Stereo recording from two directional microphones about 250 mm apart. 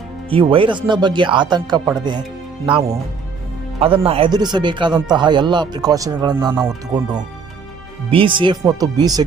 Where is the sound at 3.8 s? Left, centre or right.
Right.